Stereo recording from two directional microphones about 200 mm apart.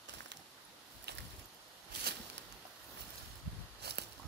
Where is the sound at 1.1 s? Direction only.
55° right (ahead or behind).